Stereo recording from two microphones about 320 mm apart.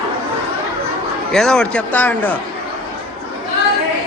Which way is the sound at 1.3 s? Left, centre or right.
Centre.